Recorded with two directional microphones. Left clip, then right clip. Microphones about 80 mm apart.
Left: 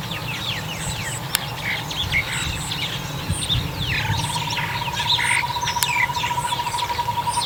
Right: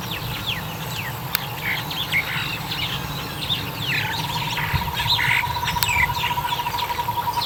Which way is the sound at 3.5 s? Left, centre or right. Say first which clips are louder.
Even; right.